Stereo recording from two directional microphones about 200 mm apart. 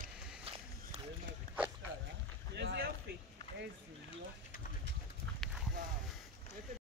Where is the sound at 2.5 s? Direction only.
55° right (ahead or behind).